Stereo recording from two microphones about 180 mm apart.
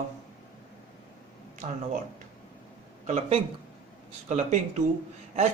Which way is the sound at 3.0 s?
40° right (ahead or behind).